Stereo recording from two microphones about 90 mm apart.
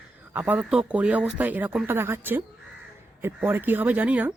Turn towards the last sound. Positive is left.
turn(degrees=-15)  # may be behind; listen again after turning